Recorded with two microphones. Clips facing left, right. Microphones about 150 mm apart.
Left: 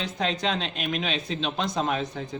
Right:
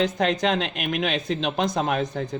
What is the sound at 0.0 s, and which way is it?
A man's voice, 55° right (ahead or behind).